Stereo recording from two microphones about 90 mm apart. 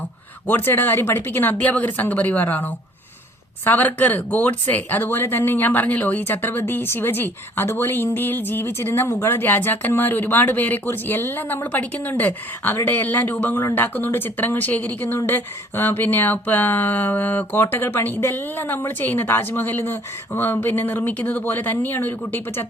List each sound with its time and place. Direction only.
0.4 s speech: 20° left (ahead or behind)